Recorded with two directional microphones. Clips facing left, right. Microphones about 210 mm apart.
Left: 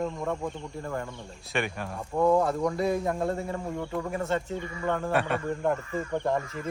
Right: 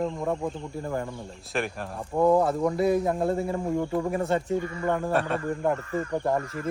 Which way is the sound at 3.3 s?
25° right (ahead or behind).